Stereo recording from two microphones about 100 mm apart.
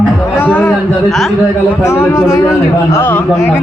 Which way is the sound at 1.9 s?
30° left (ahead or behind).